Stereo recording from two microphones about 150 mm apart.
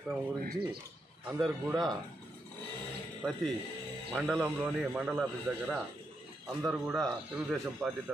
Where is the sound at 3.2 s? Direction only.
5° right (ahead or behind).